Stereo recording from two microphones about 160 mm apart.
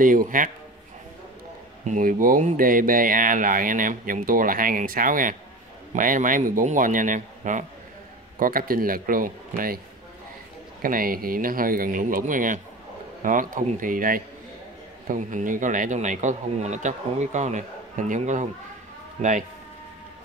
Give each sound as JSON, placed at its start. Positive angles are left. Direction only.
{"t": 0.0, "sound": "speech", "side_deg": -55}
{"t": 1.9, "sound": "speech", "side_deg": -55}
{"t": 10.8, "sound": "a man's voice", "side_deg": -65}